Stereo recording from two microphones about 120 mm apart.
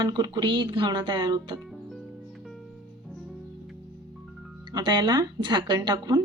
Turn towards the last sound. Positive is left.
turn(degrees=-35)  # may be behind; listen again after turning